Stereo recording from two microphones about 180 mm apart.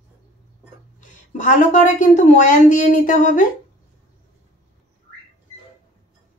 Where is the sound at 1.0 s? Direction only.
45° left (ahead or behind).